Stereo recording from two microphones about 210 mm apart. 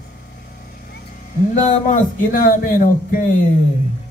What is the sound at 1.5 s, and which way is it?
Speech, 40° left (ahead or behind).